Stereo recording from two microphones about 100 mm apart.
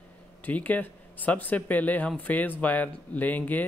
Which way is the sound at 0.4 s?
15° left (ahead or behind).